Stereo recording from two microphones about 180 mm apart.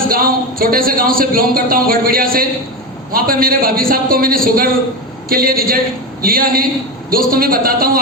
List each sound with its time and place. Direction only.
0.1 s a man's voice: 55° right (ahead or behind)